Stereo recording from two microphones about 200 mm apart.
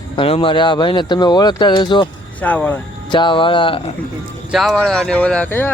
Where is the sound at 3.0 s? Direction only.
25° left (ahead or behind).